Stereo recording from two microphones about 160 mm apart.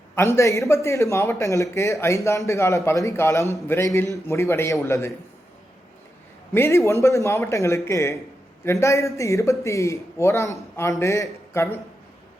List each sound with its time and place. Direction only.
0.3 s speech: 20° left (ahead or behind)
6.5 s speech: 15° left (ahead or behind)